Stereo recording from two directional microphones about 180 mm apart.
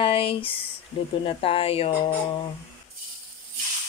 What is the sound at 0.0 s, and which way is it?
Speech, 30° left (ahead or behind).